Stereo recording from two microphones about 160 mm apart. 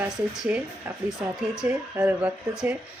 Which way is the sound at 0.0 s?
10° right (ahead or behind).